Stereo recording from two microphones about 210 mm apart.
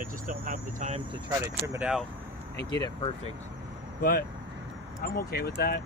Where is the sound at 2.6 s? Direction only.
20° left (ahead or behind).